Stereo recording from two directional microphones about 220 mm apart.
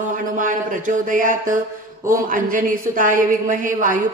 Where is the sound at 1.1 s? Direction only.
35° right (ahead or behind).